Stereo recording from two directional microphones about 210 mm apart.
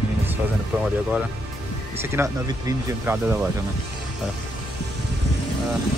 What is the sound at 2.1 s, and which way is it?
Speech, 10° right (ahead or behind).